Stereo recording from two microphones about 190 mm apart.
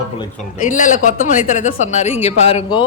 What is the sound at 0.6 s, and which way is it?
A woman's voice, 40° left (ahead or behind).